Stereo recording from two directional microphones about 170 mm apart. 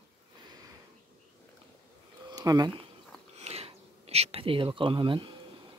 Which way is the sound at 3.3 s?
35° right (ahead or behind).